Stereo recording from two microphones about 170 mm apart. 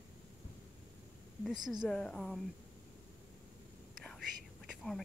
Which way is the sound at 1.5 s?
25° right (ahead or behind).